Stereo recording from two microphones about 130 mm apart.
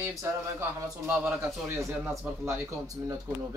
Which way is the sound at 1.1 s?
15° right (ahead or behind).